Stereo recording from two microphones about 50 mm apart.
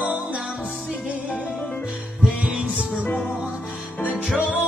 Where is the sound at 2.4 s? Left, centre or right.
Centre.